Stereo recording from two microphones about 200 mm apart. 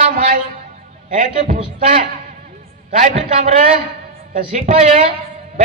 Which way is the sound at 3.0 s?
35° right (ahead or behind).